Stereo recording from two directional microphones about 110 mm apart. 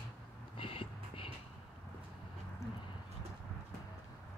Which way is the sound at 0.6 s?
55° left (ahead or behind).